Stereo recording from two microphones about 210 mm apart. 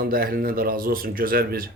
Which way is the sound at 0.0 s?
45° right (ahead or behind).